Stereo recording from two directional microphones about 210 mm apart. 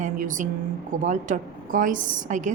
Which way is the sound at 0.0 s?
40° right (ahead or behind).